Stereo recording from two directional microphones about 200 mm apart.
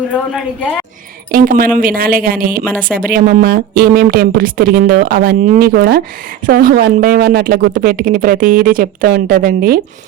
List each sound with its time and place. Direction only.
0.3 s a woman's voice: 5° left (ahead or behind)
1.3 s speech: 45° right (ahead or behind)